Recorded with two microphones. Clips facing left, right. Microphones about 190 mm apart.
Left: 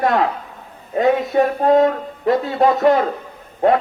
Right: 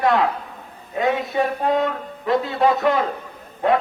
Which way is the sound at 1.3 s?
45° left (ahead or behind).